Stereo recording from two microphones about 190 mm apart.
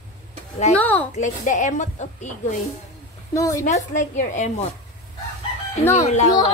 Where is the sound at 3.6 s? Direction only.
40° left (ahead or behind).